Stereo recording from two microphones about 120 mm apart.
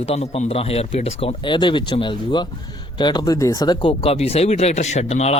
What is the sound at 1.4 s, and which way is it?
A man's voice, 40° left (ahead or behind).